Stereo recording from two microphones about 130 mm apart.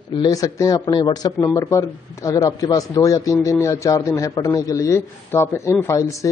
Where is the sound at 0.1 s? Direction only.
35° left (ahead or behind).